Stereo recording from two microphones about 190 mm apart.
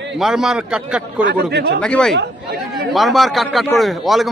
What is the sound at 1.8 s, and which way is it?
Speech, 5° left (ahead or behind).